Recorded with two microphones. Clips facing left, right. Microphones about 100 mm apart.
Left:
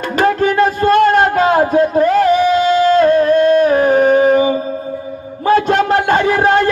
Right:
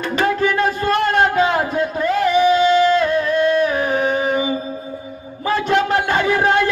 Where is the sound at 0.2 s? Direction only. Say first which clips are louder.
Left 5 dB; 45° left (ahead or behind).